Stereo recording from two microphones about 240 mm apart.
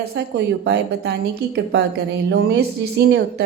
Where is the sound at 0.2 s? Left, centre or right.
Right.